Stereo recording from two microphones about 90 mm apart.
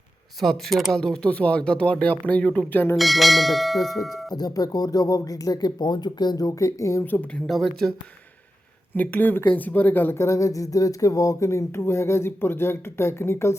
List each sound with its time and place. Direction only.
0.3 s speech: centre (ahead or behind); by 2.9 s 20° left (ahead or behind)
2.9 s speech: centre (ahead or behind)
4.4 s speech: 45° left (ahead or behind)
7.0 s speech: 15° left (ahead or behind)
7.4 s speech: 5° left (ahead or behind)
9.0 s speech: 20° left (ahead or behind)